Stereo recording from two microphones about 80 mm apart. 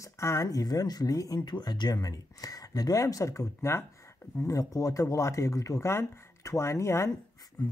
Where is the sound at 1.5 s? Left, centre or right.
Left.